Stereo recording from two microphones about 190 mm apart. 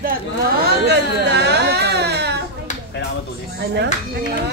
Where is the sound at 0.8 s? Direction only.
65° right (ahead or behind).